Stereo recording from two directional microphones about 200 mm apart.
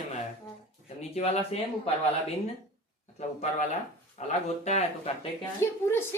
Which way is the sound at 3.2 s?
35° left (ahead or behind).